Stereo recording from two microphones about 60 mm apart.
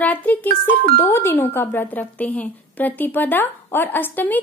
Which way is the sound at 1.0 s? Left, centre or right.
Left.